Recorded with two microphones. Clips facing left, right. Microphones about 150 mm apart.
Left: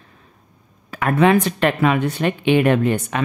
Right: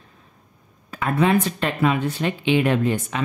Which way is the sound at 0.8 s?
80° left.